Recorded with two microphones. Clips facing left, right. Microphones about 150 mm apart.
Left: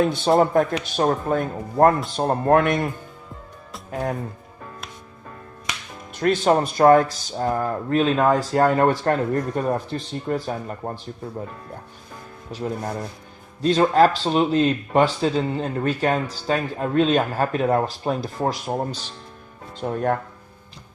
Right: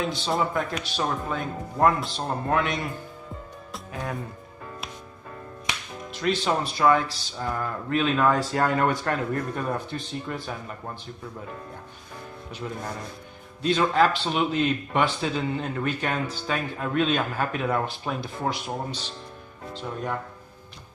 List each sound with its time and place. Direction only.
0.0 s speech: 55° left (ahead or behind)
6.1 s speech: 50° left (ahead or behind)
12.5 s speech: 40° left (ahead or behind)
19.7 s speech: 55° left (ahead or behind)